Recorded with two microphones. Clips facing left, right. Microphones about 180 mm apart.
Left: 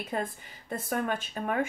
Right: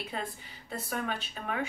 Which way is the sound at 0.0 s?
50° left (ahead or behind).